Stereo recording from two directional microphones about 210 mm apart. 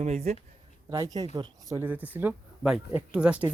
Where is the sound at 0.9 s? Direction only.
20° right (ahead or behind).